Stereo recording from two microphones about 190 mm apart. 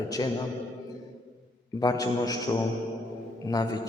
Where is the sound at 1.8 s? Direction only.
20° left (ahead or behind).